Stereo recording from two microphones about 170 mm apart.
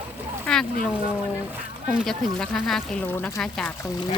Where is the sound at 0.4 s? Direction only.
5° left (ahead or behind).